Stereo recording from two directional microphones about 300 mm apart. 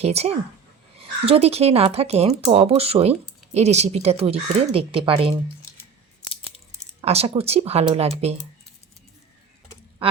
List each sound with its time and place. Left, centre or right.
0.0 s speech: right
7.0 s speech: right
10.0 s duck: centre